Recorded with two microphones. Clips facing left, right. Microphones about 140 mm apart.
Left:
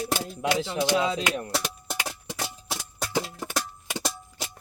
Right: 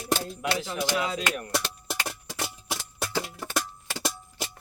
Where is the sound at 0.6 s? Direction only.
30° left (ahead or behind).